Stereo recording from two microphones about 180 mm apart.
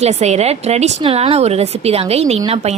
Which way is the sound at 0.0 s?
40° right (ahead or behind).